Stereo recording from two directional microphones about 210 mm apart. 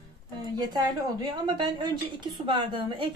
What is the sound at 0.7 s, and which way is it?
A woman's voice, 20° right (ahead or behind).